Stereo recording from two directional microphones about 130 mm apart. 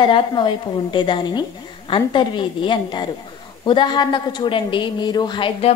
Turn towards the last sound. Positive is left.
turn(degrees=35)  # may be behind; listen again after turning